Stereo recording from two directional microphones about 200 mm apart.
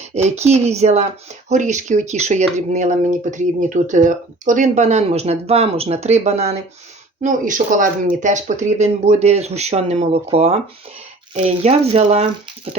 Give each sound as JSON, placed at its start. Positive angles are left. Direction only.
{"t": 0.0, "sound": "speech", "side_deg": -35}